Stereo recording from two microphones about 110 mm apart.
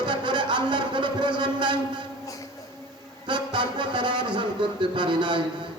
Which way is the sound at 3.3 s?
45° right (ahead or behind).